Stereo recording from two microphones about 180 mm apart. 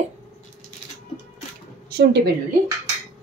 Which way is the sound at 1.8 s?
65° right (ahead or behind).